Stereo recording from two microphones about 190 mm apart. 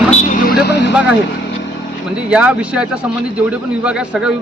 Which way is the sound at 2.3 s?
5° right (ahead or behind).